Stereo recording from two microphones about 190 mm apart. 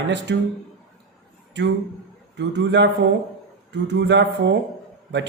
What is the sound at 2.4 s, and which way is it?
A man's voice, 65° right (ahead or behind).